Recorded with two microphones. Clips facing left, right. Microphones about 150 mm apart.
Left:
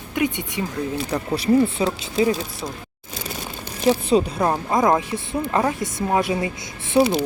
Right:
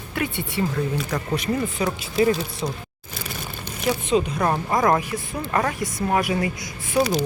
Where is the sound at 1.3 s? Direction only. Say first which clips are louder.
Left 8 dB; 30° left (ahead or behind).